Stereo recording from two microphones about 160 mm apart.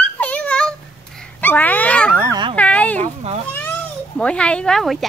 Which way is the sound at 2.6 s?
10° left (ahead or behind).